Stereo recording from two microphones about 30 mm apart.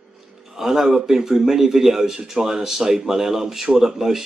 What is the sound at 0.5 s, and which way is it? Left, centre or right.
Speech, centre.